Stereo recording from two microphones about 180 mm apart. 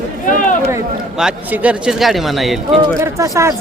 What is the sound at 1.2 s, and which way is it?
Speech, 5° right (ahead or behind).